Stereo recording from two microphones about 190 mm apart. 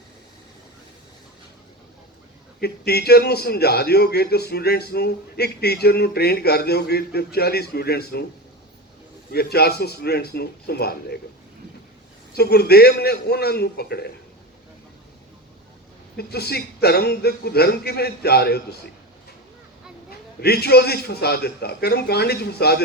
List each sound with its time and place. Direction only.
2.6 s a man's voice: 55° left (ahead or behind)
9.3 s a man's voice: 55° left (ahead or behind)
12.3 s a man's voice: 55° left (ahead or behind)
16.1 s a man's voice: 55° left (ahead or behind)
20.1 s a man's voice: 55° left (ahead or behind)